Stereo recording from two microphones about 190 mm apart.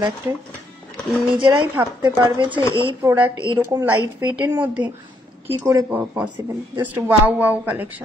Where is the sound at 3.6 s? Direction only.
15° right (ahead or behind).